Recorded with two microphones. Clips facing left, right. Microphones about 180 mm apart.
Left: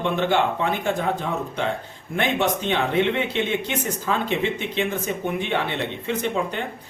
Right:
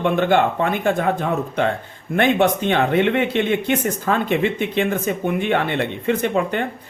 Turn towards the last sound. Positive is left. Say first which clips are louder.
# right 5 dB
turn(degrees=-55)  # may be behind; listen again after turning